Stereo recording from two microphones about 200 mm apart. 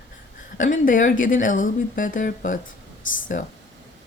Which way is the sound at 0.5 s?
40° left (ahead or behind).